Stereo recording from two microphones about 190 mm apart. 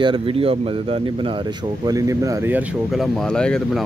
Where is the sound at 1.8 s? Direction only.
20° right (ahead or behind).